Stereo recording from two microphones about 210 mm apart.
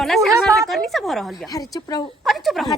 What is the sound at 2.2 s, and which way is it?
Speech, centre (ahead or behind).